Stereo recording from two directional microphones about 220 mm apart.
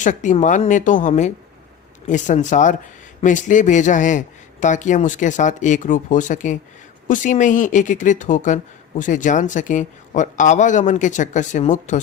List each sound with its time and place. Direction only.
0.0 s a woman's voice: 35° left (ahead or behind)